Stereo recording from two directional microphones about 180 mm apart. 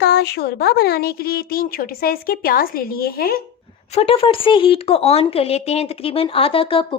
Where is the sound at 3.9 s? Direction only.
30° left (ahead or behind).